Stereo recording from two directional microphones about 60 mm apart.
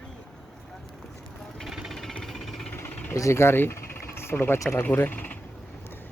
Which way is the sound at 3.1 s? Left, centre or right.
Left.